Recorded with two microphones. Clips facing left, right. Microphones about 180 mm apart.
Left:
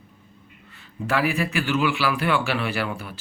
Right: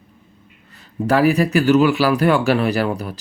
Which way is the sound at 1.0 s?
40° right (ahead or behind).